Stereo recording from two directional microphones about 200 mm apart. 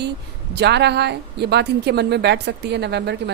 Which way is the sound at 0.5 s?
55° right (ahead or behind).